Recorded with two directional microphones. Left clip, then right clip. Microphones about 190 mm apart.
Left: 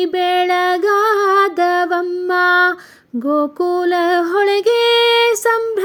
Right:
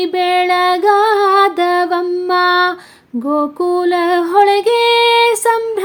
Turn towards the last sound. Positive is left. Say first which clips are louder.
# right 2 dB
turn(degrees=20)  # may be behind; listen again after turning